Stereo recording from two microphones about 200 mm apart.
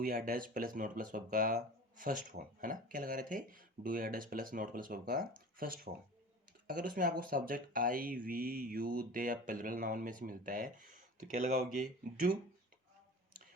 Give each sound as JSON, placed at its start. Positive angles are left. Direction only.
{"t": 0.0, "sound": "speech", "side_deg": -50}